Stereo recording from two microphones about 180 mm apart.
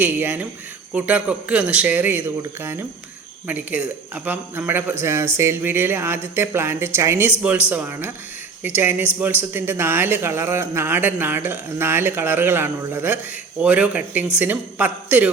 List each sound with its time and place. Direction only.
0.0 s a man's voice: 10° right (ahead or behind)